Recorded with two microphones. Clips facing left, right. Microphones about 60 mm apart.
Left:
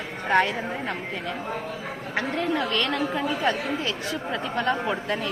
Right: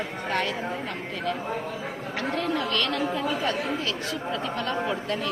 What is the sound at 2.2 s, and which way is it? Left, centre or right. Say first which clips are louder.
Speech: left 2 dB; centre.